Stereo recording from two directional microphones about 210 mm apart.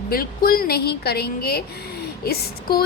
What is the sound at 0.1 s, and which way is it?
A woman's voice, 45° left (ahead or behind).